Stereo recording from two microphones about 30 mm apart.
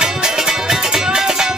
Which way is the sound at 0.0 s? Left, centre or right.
Right.